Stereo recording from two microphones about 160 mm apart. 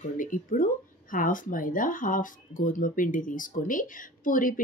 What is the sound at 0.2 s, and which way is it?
Speech, 55° left (ahead or behind).